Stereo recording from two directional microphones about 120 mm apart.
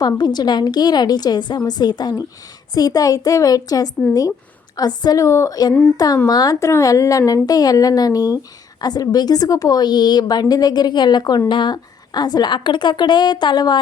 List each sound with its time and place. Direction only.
0.0 s a woman's voice: 35° left (ahead or behind)